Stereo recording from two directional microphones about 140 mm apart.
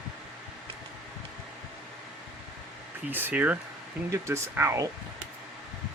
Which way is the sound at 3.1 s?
15° right (ahead or behind).